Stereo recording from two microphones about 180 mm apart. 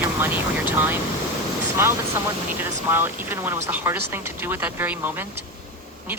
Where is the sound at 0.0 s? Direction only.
10° right (ahead or behind).